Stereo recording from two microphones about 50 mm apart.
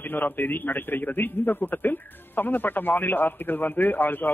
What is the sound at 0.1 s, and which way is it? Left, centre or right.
A man's voice, left.